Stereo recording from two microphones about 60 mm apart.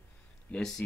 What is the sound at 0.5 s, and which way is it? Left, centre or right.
Speech, centre.